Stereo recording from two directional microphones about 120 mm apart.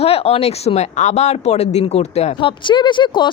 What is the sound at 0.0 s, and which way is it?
Speech, 55° left (ahead or behind).